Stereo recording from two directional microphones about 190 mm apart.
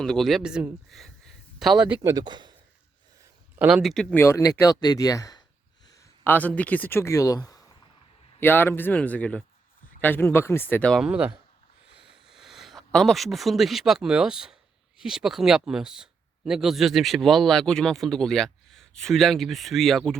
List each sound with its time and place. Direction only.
0.0 s speech: centre (ahead or behind)
2.0 s a man's voice: 20° right (ahead or behind)
3.5 s speech: 10° right (ahead or behind)
11.9 s a sound: 5° right (ahead or behind)
14.9 s speech: 5° right (ahead or behind)